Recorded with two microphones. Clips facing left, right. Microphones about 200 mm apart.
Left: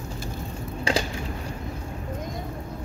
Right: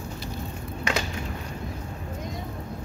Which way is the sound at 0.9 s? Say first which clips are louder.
Left 3 dB; 30° left (ahead or behind).